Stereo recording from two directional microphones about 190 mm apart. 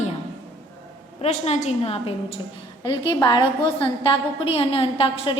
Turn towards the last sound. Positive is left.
turn(degrees=30)  # may be behind; listen again after turning